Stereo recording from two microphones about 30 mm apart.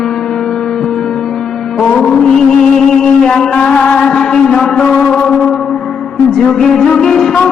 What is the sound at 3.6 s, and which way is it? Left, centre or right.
Mantra, left.